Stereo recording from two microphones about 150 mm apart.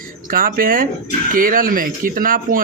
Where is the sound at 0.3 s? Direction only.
70° right (ahead or behind).